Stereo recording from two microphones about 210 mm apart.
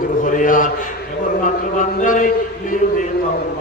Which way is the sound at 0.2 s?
40° left (ahead or behind).